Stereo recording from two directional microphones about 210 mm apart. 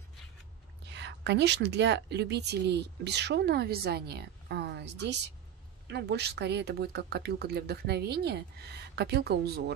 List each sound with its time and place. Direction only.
0.9 s a woman's voice: 55° right (ahead or behind)